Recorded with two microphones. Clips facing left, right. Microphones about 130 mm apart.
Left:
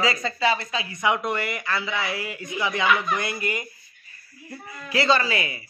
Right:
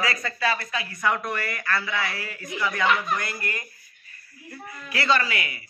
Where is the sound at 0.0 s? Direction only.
25° left (ahead or behind).